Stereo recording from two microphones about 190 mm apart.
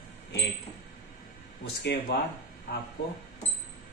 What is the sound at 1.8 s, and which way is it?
Speech, 65° left (ahead or behind).